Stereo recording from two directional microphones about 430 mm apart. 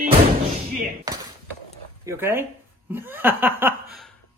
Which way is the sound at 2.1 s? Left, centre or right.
Centre.